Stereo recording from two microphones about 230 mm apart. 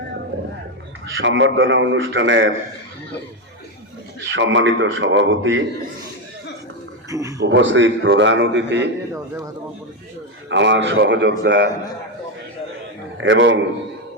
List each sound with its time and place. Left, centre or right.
1.1 s a man's voice: right
4.2 s a man's voice: right
7.1 s speech: centre
7.4 s a man's voice: right
10.5 s a man's voice: right
13.1 s a man's voice: right